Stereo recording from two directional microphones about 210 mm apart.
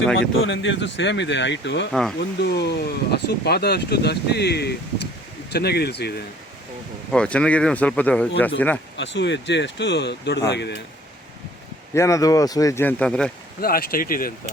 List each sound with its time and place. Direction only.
0.2 s speech: 65° left (ahead or behind)
1.9 s speech: centre (ahead or behind)
2.4 s speech: 55° left (ahead or behind)
7.1 s speech: 5° left (ahead or behind)
9.0 s speech: 55° left (ahead or behind)
11.9 s speech: 15° left (ahead or behind)
13.6 s speech: 45° left (ahead or behind)